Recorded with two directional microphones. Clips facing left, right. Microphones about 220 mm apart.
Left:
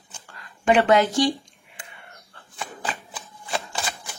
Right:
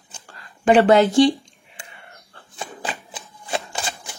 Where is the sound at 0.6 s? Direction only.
30° right (ahead or behind).